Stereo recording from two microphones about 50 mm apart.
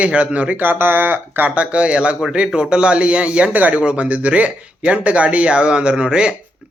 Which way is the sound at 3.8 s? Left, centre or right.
Right.